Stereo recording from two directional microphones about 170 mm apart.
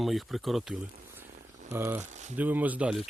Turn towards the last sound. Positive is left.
turn(degrees=-5)  # may be behind; listen again after turning